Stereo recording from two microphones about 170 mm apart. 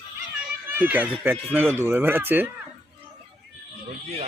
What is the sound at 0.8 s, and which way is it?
Speech, 10° right (ahead or behind).